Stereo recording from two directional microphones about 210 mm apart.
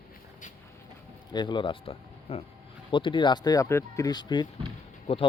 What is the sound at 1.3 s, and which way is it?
Speech, 20° left (ahead or behind).